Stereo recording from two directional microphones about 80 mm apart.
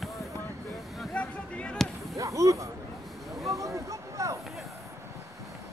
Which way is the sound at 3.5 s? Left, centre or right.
Right.